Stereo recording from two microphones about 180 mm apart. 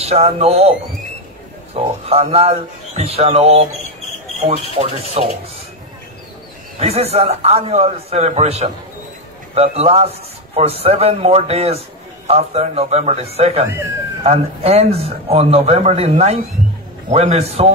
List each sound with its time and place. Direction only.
0.0 s a man's voice: 35° right (ahead or behind)
4.7 s a man's voice: 30° right (ahead or behind)
6.8 s a man's voice: 35° right (ahead or behind)